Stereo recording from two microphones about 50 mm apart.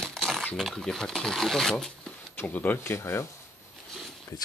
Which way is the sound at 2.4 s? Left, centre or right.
Left.